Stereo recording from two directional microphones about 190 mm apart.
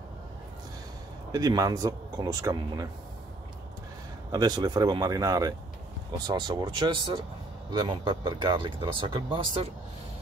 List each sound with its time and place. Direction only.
1.3 s speech: 20° right (ahead or behind)
4.3 s speech: 20° right (ahead or behind)